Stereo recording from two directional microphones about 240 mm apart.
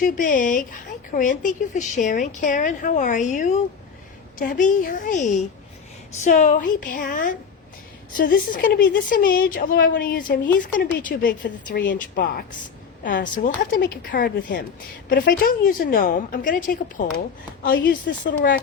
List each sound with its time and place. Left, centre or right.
0.0 s a woman's voice: left
13.7 s a woman's voice: left